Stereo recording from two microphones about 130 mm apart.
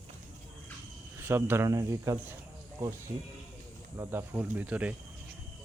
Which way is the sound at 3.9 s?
15° right (ahead or behind).